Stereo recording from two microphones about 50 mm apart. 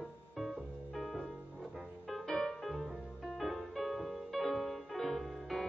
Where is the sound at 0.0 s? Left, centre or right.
Centre.